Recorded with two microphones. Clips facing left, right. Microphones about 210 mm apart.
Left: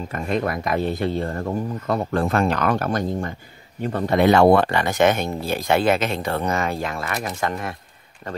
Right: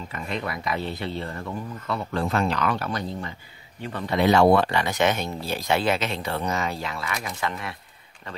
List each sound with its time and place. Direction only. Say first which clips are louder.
0.1 s speech: left 8 dB; 45° left (ahead or behind)